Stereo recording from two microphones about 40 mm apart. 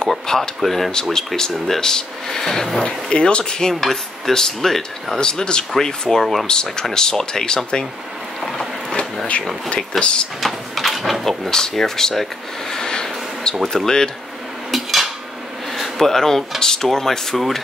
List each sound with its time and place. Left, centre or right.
0.1 s speech: centre
1.1 s speech: centre
2.8 s speech: left
5.2 s speech: left
9.9 s speech: left
10.4 s speech: centre
11.2 s speech: centre
14.7 s cutlery: centre
15.7 s speech: centre